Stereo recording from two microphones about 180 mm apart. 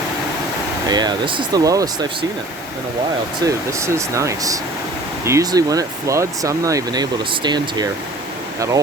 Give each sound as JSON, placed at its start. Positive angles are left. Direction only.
{"t": 0.9, "sound": "speech", "side_deg": -20}
{"t": 3.4, "sound": "speech", "side_deg": -15}